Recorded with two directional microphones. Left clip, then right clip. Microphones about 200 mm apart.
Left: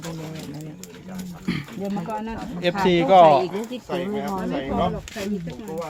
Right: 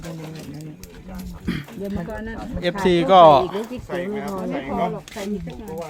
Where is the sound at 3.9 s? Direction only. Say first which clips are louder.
Left 1 dB; 5° right (ahead or behind).